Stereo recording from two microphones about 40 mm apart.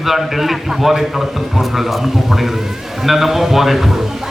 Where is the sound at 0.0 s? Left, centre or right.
Centre.